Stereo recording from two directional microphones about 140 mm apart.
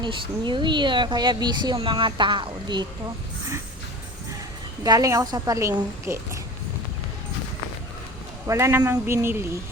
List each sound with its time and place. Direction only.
0.0 s speech: 35° right (ahead or behind)
4.8 s a woman's voice: 25° right (ahead or behind)
8.4 s speech: 20° right (ahead or behind)